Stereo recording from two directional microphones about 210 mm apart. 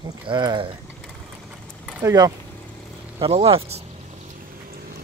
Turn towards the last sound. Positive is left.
turn(degrees=-30)  # may be behind; listen again after turning